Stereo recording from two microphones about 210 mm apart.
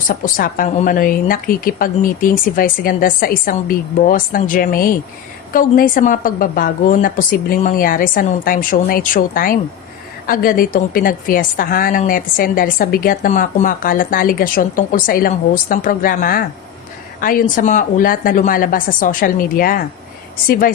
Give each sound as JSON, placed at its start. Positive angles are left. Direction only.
{"t": 0.1, "sound": "a woman's voice", "side_deg": 40}